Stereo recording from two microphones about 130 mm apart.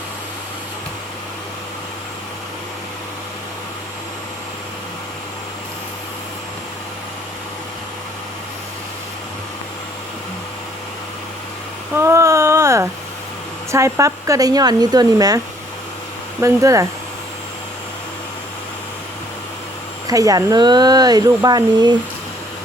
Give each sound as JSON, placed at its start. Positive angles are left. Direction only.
{"t": 11.9, "sound": "a sound", "side_deg": -20}
{"t": 13.7, "sound": "speech", "side_deg": -20}
{"t": 16.4, "sound": "speech", "side_deg": -25}
{"t": 20.1, "sound": "speech", "side_deg": -25}